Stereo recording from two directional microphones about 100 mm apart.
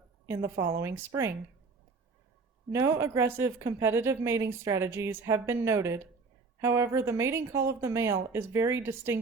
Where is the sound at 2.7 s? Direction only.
30° right (ahead or behind).